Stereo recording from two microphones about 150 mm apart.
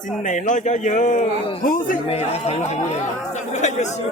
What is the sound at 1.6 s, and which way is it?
Speech, 65° left (ahead or behind).